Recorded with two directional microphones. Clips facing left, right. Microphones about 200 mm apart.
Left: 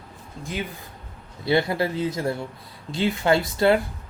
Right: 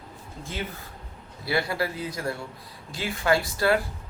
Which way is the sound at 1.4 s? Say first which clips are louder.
Left 5 dB; 25° left (ahead or behind).